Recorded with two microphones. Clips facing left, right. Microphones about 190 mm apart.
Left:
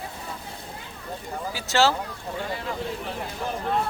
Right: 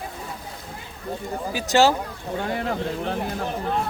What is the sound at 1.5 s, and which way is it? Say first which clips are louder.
Speech: right 4 dB; 15° right (ahead or behind).